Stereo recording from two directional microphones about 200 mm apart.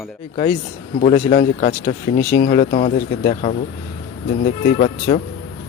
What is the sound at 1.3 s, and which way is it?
Speech, 35° left (ahead or behind).